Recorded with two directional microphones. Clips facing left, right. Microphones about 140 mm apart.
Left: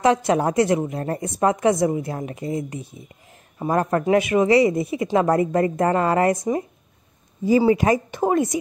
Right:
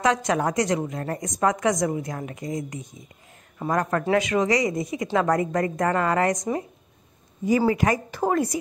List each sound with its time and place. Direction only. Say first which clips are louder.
0.0 s a woman's voice: left 4 dB; 25° left (ahead or behind)
7.4 s a woman's voice: left 4 dB; 25° left (ahead or behind)